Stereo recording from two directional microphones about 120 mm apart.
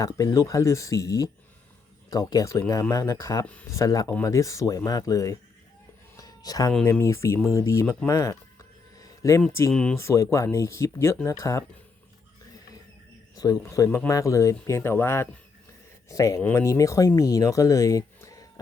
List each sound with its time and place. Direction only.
0.0 s speech: 30° left (ahead or behind)
3.4 s speech: 10° left (ahead or behind)
3.7 s speech: 30° left (ahead or behind)
6.1 s a sound: 30° left (ahead or behind)
7.0 s speech: 25° left (ahead or behind)
8.0 s a sound: 25° left (ahead or behind)
9.5 s speech: 20° left (ahead or behind)
9.7 s speech: 10° left (ahead or behind)
10.0 s speech: 25° left (ahead or behind)
13.3 s speech: 30° left (ahead or behind)